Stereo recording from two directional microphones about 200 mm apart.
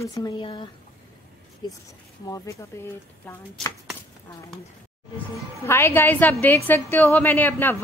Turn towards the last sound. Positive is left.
turn(degrees=10)  # may be behind; listen again after turning